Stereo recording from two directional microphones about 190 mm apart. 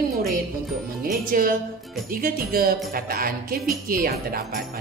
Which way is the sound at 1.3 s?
50° right (ahead or behind).